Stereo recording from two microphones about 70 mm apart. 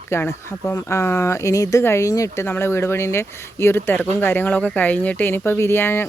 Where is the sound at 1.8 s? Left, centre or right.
Left.